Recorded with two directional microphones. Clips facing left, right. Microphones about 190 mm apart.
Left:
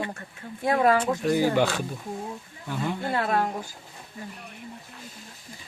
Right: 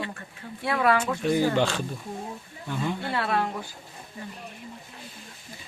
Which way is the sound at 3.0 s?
45° left (ahead or behind).